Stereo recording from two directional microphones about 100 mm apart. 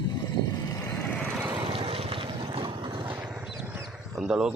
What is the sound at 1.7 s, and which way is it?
Vehicle, 70° right (ahead or behind).